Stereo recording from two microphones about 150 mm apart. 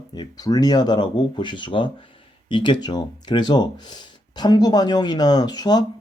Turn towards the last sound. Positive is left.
turn(degrees=25)  # may be behind; listen again after turning